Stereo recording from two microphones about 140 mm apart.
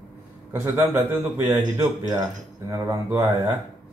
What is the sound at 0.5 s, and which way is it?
A man's voice, 15° right (ahead or behind).